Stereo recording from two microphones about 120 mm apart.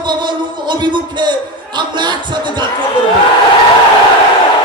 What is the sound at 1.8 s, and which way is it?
Speech, 40° right (ahead or behind).